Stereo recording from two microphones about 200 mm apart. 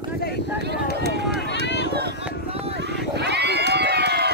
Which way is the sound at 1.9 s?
55° right (ahead or behind).